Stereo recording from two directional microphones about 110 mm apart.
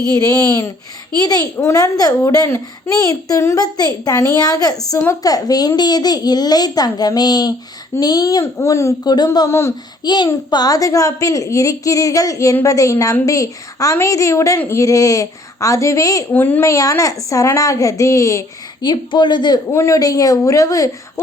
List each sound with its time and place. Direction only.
0.1 s a child's voice: 35° left (ahead or behind)
9.1 s a child's voice: 35° left (ahead or behind)
9.5 s a woman's voice: 25° left (ahead or behind)
10.0 s a child's voice: 40° left (ahead or behind)
16.3 s a child's voice: 20° left (ahead or behind)
18.9 s speech: 45° left (ahead or behind)
19.7 s a child's voice: 30° left (ahead or behind)